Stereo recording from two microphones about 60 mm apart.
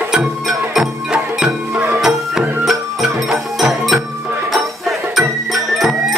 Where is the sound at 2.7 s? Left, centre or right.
Centre.